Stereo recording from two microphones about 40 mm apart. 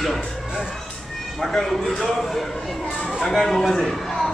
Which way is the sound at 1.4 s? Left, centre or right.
Centre.